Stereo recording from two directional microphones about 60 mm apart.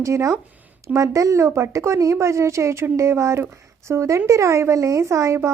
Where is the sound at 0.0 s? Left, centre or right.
Right.